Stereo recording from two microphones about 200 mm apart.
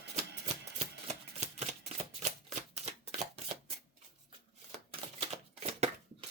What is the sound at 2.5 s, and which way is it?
Shuffling cards, 35° right (ahead or behind).